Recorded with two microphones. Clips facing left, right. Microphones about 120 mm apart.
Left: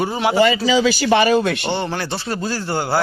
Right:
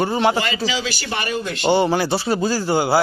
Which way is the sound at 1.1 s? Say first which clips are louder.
Left 10 dB; 90° left.